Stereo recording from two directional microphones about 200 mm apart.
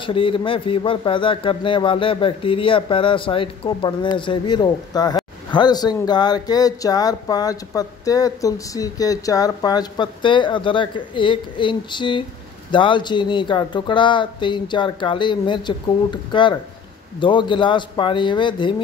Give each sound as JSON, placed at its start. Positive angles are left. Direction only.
{"t": 0.0, "sound": "speech", "side_deg": 25}